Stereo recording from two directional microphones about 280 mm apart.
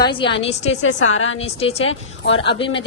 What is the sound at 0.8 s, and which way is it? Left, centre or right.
Speech, left.